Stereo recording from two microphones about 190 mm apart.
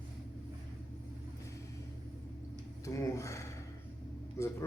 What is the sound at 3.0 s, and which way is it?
A man's voice, 15° left (ahead or behind).